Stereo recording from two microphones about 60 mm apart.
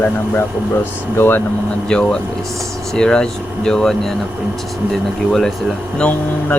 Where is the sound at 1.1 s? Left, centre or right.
Left.